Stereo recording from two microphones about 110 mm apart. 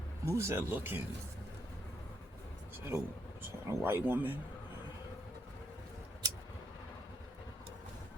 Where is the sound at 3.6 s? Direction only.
20° right (ahead or behind).